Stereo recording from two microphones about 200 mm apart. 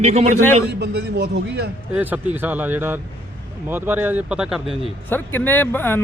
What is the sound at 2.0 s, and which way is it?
Speech, 10° right (ahead or behind).